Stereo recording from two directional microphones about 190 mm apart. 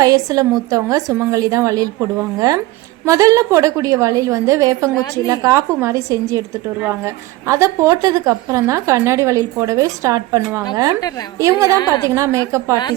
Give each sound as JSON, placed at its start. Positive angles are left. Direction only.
{"t": 0.0, "sound": "a woman's voice", "side_deg": -20}